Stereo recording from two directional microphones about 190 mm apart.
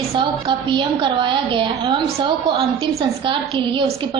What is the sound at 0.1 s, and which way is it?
A woman's voice, 25° right (ahead or behind).